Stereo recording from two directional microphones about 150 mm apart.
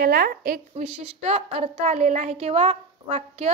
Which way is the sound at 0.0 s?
85° right.